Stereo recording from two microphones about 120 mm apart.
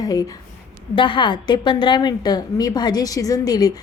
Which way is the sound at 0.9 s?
45° left (ahead or behind).